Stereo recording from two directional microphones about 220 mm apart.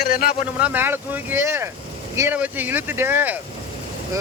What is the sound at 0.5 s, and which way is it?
Speech, 5° right (ahead or behind).